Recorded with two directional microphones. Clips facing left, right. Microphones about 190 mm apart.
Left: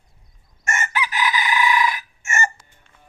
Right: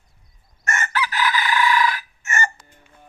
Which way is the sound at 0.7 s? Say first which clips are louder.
Even; 15° left (ahead or behind).